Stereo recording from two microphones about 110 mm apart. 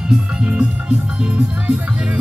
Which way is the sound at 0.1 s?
10° right (ahead or behind).